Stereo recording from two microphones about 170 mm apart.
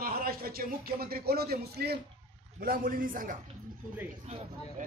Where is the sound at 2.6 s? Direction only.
55° right (ahead or behind).